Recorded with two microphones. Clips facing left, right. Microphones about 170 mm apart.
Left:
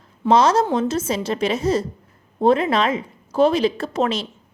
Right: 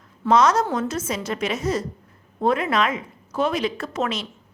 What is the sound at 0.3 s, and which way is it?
A woman's voice, 30° left (ahead or behind).